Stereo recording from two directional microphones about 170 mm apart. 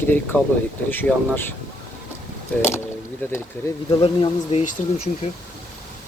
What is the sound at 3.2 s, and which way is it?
Speech, 15° left (ahead or behind).